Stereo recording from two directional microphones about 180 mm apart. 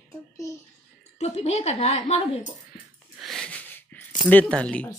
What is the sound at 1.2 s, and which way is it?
A woman's voice, 35° left (ahead or behind).